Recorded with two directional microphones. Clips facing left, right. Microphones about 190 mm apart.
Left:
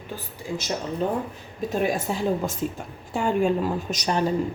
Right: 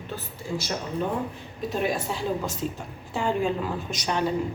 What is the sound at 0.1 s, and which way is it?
Speech, 20° left (ahead or behind).